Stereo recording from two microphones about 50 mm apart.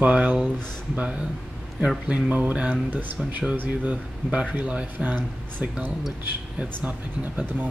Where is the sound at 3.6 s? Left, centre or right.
Right.